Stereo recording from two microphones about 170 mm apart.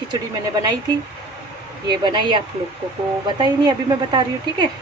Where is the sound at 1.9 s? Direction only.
25° right (ahead or behind).